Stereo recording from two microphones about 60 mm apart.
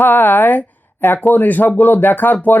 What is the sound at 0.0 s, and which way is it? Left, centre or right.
Speech, left.